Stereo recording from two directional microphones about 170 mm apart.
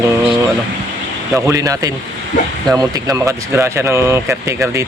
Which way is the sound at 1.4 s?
20° right (ahead or behind).